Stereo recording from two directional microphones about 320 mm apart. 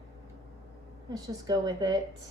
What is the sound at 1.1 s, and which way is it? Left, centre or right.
Speech, centre.